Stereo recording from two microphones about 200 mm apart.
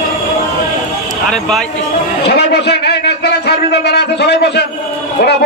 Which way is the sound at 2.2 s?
55° left (ahead or behind).